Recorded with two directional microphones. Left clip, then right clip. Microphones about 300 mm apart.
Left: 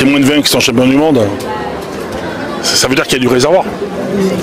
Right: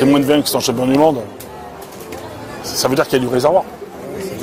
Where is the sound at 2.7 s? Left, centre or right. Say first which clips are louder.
Left 3 dB; right.